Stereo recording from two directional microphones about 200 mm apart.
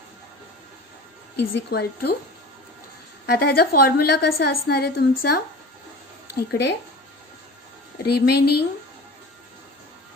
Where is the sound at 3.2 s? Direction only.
55° left (ahead or behind).